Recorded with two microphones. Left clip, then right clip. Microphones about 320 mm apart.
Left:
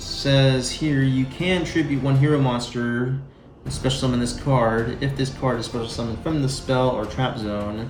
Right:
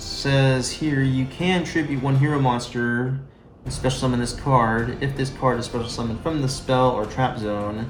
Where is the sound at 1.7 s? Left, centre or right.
Centre.